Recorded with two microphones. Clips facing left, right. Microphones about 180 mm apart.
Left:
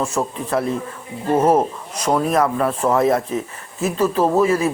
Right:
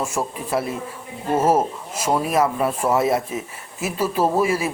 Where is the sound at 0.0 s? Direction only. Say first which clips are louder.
Left 3 dB; 10° right (ahead or behind).